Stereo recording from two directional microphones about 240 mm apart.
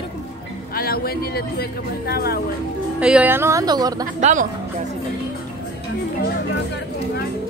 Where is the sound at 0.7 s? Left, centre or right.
Left.